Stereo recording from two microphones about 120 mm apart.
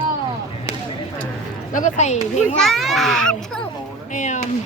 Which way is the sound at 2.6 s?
Centre (ahead or behind).